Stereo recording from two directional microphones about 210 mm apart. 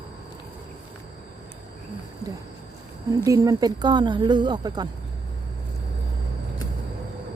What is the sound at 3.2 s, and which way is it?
Speech, 15° right (ahead or behind).